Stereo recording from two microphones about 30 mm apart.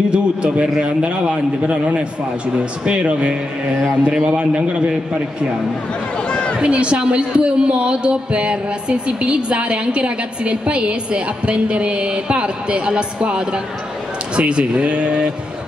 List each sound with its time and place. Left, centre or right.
0.1 s speech: right
4.1 s a man's voice: right
4.4 s speech: right
6.2 s a sound: left
6.6 s speech: right